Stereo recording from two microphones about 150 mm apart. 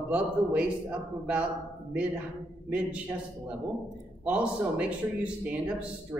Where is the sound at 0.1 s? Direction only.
10° right (ahead or behind).